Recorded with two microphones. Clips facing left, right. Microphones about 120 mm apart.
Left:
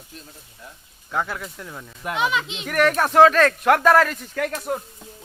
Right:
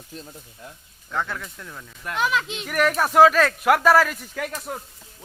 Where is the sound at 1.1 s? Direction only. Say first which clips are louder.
Left 2 dB; 15° left (ahead or behind).